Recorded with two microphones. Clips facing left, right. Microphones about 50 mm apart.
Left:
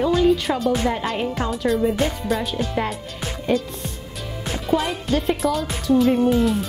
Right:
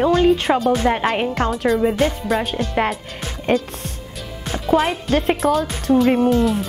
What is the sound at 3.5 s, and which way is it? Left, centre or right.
Speech, centre.